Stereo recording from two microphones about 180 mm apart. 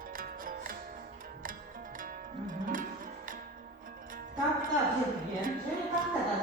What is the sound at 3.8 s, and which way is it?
Music, 50° right (ahead or behind).